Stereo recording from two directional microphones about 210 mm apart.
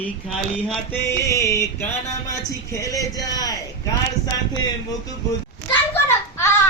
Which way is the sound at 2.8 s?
15° left (ahead or behind).